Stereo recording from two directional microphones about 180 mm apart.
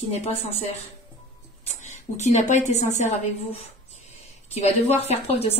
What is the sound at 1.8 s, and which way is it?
A woman's voice, 40° left (ahead or behind).